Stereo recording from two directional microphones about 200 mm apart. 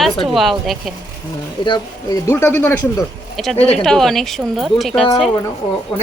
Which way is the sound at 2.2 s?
15° left (ahead or behind).